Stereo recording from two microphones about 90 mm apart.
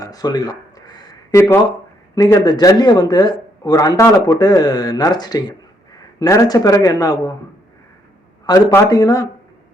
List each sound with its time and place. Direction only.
0.0 s a sound: 45° left (ahead or behind)
1.3 s speech: 30° left (ahead or behind)
2.1 s speech: 45° left (ahead or behind)
8.5 s speech: 50° left (ahead or behind)
8.9 s speech: 40° left (ahead or behind)